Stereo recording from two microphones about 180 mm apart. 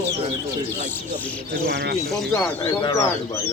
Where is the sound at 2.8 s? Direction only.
25° left (ahead or behind).